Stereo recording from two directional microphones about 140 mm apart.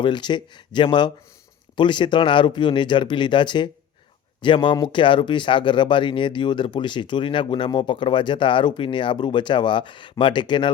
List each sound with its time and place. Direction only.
0.0 s speech: 35° left (ahead or behind)